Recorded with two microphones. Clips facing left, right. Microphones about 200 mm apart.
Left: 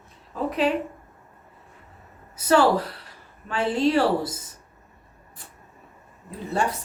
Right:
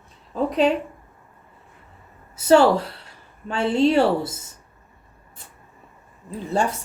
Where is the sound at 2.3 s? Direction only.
25° right (ahead or behind).